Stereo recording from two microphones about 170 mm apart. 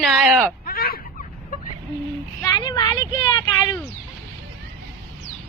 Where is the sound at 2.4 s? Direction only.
25° left (ahead or behind).